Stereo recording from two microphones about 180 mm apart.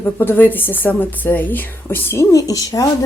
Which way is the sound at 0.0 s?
10° left (ahead or behind).